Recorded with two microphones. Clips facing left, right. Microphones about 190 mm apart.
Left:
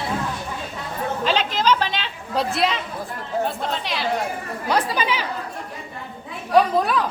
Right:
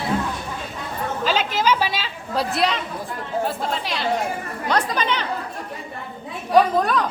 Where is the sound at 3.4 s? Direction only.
Centre (ahead or behind).